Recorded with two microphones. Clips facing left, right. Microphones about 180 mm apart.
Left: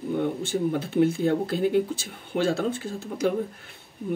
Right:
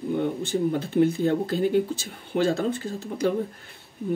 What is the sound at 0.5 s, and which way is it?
Speech, 5° left (ahead or behind).